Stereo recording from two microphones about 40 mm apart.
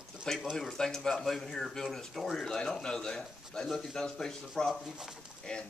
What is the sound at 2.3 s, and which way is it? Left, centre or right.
A man's voice, centre.